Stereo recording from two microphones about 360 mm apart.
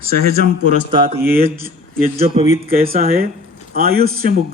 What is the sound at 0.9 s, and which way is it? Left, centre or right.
A man's voice, centre.